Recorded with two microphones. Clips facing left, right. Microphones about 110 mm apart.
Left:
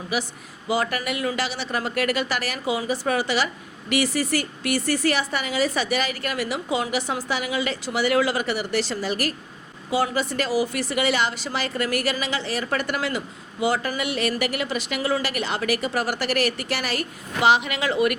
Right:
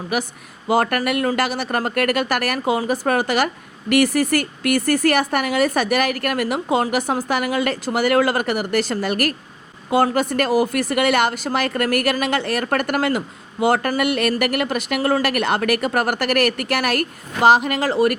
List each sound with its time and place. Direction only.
0.1 s speech: 55° right (ahead or behind)